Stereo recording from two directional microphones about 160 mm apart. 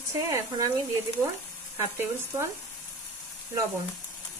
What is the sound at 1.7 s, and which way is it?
Speech, 15° right (ahead or behind).